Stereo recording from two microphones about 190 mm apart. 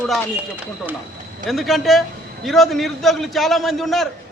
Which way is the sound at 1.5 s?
Centre (ahead or behind).